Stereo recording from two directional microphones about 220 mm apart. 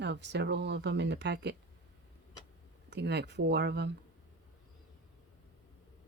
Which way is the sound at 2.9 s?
50° right (ahead or behind).